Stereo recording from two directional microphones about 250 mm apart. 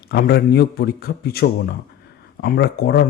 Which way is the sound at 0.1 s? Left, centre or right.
Left.